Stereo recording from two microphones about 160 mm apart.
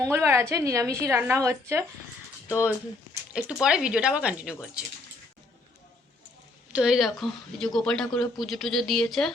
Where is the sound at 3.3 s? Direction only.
5° right (ahead or behind).